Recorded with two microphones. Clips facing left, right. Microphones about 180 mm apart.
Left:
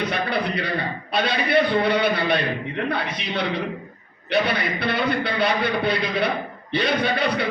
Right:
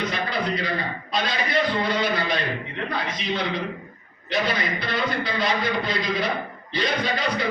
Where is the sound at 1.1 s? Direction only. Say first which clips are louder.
Left 5 dB; 65° left (ahead or behind).